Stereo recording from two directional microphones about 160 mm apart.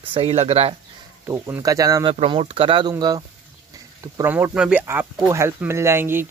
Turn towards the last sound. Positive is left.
turn(degrees=-15)  # may be behind; listen again after turning